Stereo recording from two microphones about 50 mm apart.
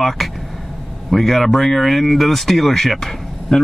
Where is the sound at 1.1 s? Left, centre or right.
Centre.